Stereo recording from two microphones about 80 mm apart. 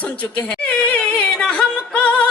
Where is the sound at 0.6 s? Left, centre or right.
Centre.